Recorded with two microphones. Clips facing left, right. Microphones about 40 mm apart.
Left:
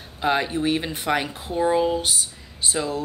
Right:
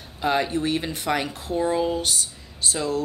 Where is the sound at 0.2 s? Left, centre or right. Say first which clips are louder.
Left 1 dB; centre.